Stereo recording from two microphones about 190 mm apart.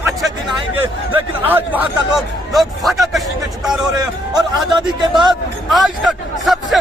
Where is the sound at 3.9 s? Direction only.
20° right (ahead or behind).